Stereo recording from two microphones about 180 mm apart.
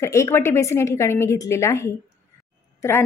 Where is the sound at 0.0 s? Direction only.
15° left (ahead or behind).